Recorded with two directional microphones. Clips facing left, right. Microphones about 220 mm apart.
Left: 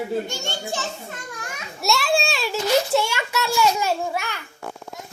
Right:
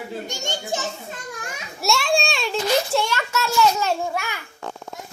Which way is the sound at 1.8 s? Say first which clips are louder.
Even; centre (ahead or behind).